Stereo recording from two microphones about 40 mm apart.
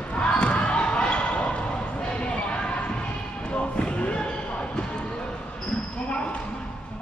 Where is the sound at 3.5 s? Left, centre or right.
Left.